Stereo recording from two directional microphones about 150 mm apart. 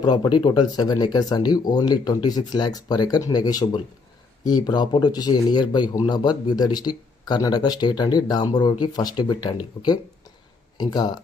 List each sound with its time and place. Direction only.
0.0 s speech: 30° left (ahead or behind)
10.8 s speech: 25° left (ahead or behind)